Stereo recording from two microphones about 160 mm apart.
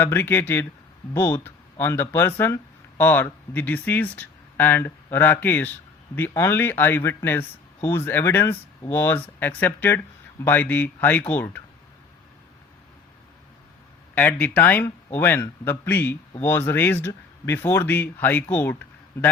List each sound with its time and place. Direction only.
0.0 s speech: 15° left (ahead or behind)
14.2 s speech: 10° left (ahead or behind)